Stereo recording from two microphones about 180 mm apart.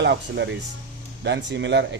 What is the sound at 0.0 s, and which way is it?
A man's voice, 75° right (ahead or behind).